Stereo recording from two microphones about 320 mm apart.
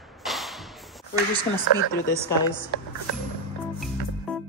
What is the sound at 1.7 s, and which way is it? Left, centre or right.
Speech, left.